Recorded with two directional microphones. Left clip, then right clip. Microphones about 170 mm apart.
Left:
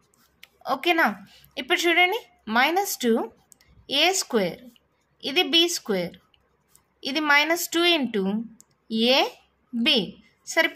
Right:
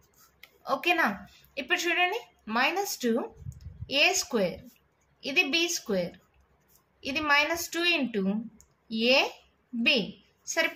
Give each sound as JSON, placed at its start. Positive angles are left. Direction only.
{"t": 0.6, "sound": "a woman's voice", "side_deg": 40}